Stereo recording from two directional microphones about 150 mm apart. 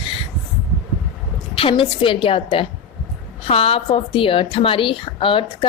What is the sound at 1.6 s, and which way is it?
Speech, 35° left (ahead or behind).